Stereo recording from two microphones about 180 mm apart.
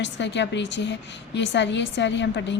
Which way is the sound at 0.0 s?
80° left.